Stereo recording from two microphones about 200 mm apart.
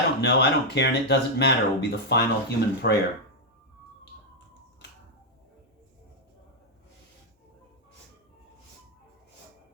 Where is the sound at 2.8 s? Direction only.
50° left (ahead or behind).